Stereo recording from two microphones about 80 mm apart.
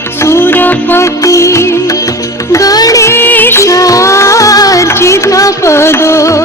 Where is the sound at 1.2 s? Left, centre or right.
Left.